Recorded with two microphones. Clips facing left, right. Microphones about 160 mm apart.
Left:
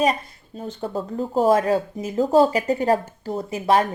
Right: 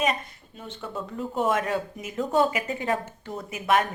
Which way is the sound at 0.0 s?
35° left (ahead or behind).